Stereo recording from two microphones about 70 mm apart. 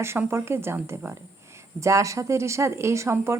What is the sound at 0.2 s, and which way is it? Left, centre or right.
Speech, right.